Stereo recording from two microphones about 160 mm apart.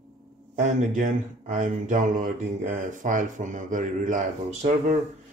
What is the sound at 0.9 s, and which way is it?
Speech, 55° right (ahead or behind).